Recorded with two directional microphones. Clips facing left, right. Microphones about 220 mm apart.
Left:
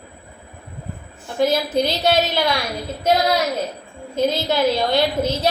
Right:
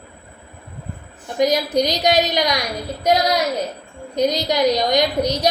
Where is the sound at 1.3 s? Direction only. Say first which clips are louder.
Right 1 dB; 15° right (ahead or behind).